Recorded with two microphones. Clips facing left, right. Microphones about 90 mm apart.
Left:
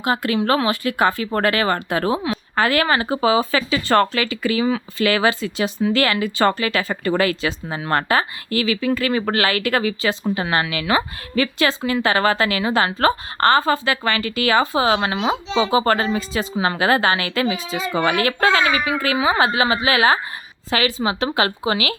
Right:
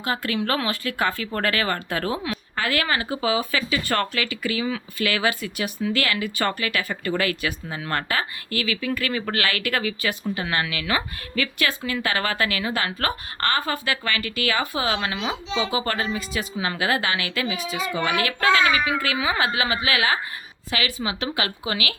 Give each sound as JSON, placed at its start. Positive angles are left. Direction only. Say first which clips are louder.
{"t": 0.0, "sound": "speech", "louder": "left 6 dB", "side_deg": 20}
{"t": 2.6, "sound": "a woman's voice", "louder": "left 7 dB", "side_deg": 35}